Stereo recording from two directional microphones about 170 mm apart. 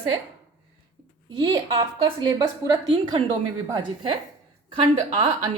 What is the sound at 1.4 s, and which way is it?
A woman's voice, 30° right (ahead or behind).